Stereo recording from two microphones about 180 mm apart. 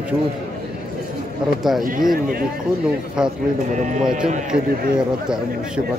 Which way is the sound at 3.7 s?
40° right (ahead or behind).